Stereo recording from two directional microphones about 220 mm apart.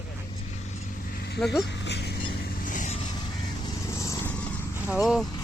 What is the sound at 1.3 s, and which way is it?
Speech, centre (ahead or behind).